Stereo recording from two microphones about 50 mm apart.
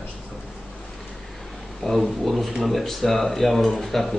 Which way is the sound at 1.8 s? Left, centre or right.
Centre.